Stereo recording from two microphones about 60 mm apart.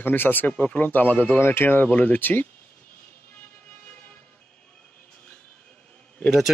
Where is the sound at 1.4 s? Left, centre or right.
Left.